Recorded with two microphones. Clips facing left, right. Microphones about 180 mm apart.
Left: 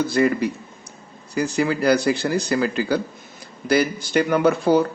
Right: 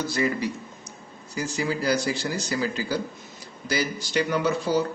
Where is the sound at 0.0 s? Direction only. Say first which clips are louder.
Left 7 dB; 55° left (ahead or behind).